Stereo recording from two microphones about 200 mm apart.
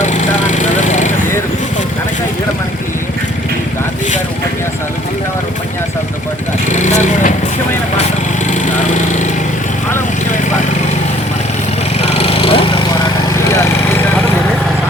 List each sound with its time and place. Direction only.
0.0 s vehicle: 35° left (ahead or behind)
6.7 s vehicle: 35° left (ahead or behind)
12.1 s vehicle: 30° left (ahead or behind)